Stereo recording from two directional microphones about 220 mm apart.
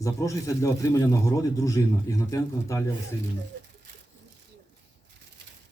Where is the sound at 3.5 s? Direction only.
50° right (ahead or behind).